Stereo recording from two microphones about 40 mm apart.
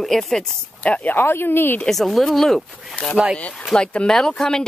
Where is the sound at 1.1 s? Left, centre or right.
Left.